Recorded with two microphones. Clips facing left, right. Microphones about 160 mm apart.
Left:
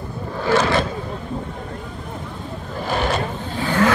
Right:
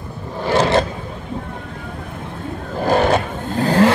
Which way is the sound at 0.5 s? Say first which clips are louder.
Right 2 dB; 25° right (ahead or behind).